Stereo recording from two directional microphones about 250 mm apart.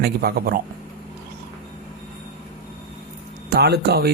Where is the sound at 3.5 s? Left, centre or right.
Right.